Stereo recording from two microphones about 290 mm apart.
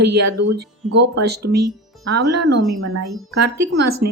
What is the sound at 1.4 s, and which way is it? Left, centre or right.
Speech, right.